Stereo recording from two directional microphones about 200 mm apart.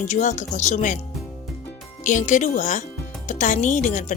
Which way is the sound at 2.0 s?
40° left (ahead or behind).